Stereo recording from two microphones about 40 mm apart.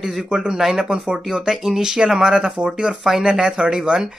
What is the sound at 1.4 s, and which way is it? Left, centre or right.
Speech, centre.